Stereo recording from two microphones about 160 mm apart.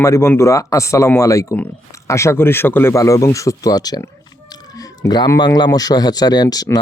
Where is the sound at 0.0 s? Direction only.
15° left (ahead or behind).